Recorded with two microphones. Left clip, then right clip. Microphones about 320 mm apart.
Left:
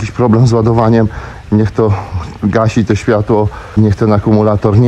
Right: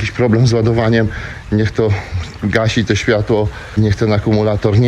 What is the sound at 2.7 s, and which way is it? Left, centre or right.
Speech, left.